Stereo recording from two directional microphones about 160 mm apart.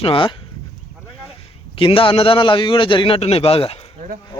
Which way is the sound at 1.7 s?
35° left (ahead or behind).